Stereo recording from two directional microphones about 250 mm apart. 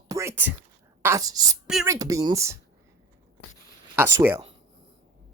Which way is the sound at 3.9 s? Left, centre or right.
Centre.